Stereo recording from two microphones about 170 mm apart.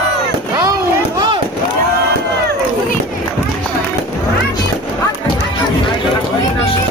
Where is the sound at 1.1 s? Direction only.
25° right (ahead or behind).